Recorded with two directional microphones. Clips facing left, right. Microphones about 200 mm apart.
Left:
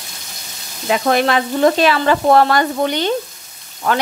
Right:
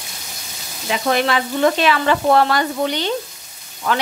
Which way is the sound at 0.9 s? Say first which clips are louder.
Left 3 dB; 45° left (ahead or behind).